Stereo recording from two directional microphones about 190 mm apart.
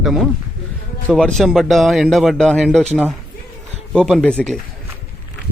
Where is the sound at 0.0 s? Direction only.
Centre (ahead or behind).